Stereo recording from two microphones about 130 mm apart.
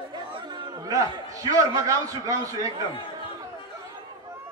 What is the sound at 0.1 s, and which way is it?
Chatter, 35° right (ahead or behind).